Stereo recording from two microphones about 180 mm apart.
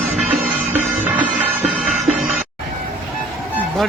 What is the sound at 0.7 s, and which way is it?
Music, 40° right (ahead or behind).